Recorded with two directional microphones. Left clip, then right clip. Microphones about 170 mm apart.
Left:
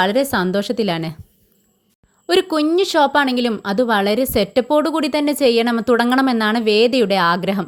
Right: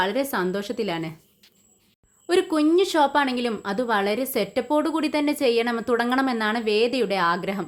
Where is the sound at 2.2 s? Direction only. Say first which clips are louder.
Left 4 dB; 40° left (ahead or behind).